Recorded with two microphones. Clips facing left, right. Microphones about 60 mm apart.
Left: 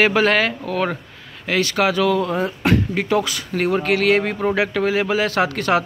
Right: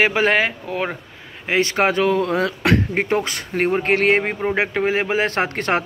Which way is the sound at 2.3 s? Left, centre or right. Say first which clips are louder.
Right 1 dB; right.